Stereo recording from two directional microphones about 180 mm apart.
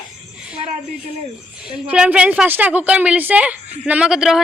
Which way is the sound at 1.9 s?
5° right (ahead or behind).